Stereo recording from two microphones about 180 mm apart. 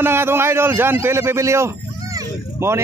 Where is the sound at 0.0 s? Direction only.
15° right (ahead or behind).